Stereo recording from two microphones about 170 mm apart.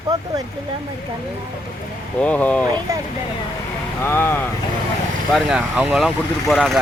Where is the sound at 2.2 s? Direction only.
10° left (ahead or behind).